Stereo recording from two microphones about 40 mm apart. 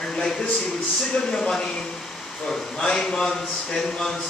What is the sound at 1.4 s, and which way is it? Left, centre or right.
A man's voice, left.